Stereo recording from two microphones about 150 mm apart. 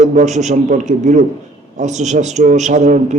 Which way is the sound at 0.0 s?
50° right (ahead or behind).